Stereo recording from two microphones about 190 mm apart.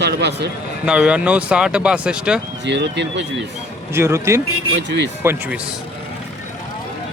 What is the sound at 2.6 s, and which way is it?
Speech, 65° right (ahead or behind).